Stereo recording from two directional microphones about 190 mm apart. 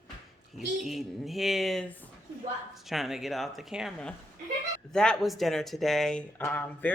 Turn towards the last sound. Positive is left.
turn(degrees=10)  # may be behind; listen again after turning